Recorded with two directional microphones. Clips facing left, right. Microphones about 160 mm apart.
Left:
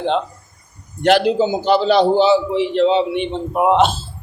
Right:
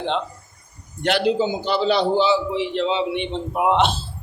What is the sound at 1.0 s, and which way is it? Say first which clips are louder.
A man's voice: left 5 dB; 45° left (ahead or behind).